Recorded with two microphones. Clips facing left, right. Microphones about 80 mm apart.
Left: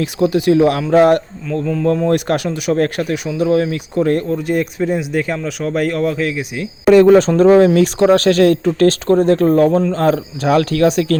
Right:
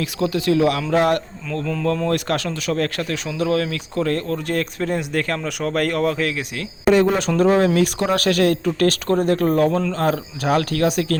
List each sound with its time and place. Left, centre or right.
0.0 s speech: centre
4.4 s speech: centre
6.9 s speech: left
7.2 s speech: left